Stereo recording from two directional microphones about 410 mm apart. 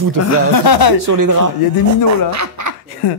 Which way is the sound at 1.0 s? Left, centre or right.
Right.